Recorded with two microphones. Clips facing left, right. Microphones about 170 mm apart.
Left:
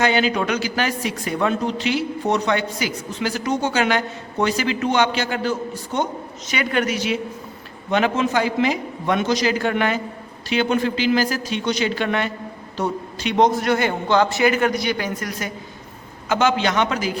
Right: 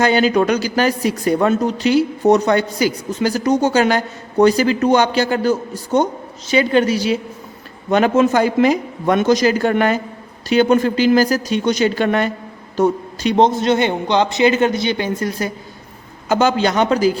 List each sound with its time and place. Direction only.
0.0 s speech: 40° right (ahead or behind)
6.5 s speech: 30° right (ahead or behind)
7.9 s a man's voice: 45° right (ahead or behind)
13.3 s a man's voice: 25° right (ahead or behind)